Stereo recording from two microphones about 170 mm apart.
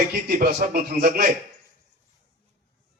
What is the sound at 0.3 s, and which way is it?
A man's voice, 60° right (ahead or behind).